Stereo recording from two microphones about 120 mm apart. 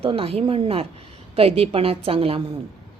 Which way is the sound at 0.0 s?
50° right (ahead or behind).